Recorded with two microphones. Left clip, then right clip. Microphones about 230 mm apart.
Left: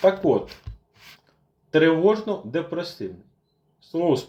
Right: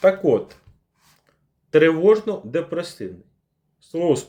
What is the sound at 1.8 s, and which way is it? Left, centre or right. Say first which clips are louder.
Speech: right 3 dB; right.